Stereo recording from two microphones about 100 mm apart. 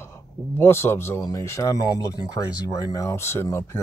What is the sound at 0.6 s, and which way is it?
Speech, 25° left (ahead or behind).